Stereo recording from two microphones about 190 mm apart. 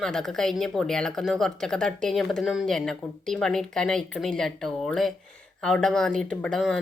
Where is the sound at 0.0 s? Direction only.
Centre (ahead or behind).